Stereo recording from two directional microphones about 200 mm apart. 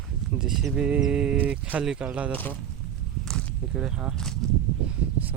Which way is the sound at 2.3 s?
10° left (ahead or behind).